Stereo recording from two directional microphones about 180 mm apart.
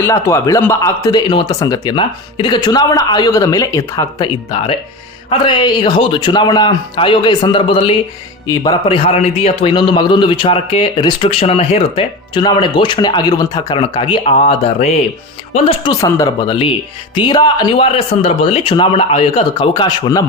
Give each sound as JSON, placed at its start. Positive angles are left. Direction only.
{"t": 0.0, "sound": "a man's voice", "side_deg": 15}
{"t": 9.0, "sound": "a man's voice", "side_deg": 35}
{"t": 16.4, "sound": "a man's voice", "side_deg": 30}